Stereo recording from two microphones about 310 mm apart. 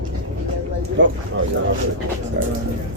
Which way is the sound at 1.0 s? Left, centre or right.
Right.